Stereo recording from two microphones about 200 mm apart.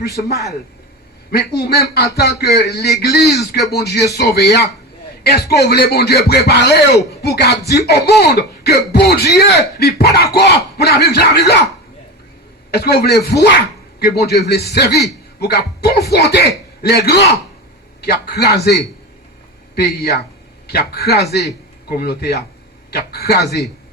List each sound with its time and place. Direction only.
1.3 s a man's voice: 55° left (ahead or behind)
3.2 s speech: centre (ahead or behind)
3.7 s a man's voice: 55° left (ahead or behind)
12.7 s a man's voice: 50° left (ahead or behind)